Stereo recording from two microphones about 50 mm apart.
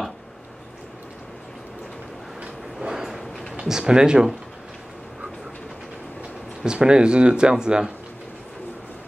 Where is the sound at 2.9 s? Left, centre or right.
Centre.